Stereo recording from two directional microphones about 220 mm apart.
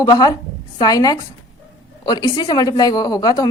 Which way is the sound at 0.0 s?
15° left (ahead or behind).